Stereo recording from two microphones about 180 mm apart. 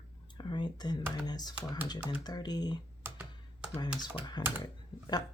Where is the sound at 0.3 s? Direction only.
25° left (ahead or behind).